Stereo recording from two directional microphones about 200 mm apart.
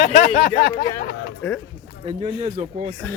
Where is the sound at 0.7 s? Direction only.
55° left (ahead or behind).